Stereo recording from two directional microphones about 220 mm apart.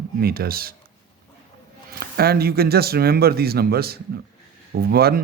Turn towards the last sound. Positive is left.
turn(degrees=-45)  # may be behind; listen again after turning